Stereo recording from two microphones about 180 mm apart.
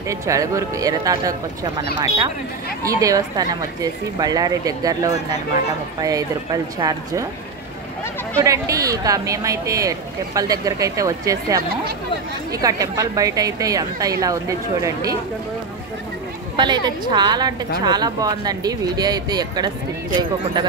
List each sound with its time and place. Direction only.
0.1 s speech: 15° right (ahead or behind)
2.8 s speech: 20° right (ahead or behind)
8.4 s speech: 20° right (ahead or behind)
16.5 s speech: 25° right (ahead or behind)